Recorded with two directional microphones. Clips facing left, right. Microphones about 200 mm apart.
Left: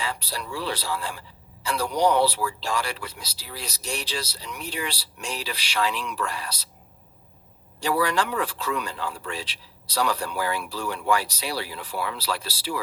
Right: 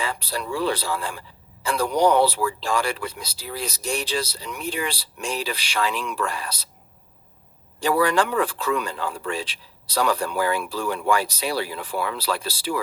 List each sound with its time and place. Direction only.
0.0 s speech: 50° right (ahead or behind)
7.8 s speech: 50° right (ahead or behind)